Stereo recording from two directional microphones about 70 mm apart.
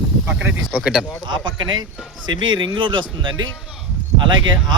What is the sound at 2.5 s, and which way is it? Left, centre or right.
Speech, right.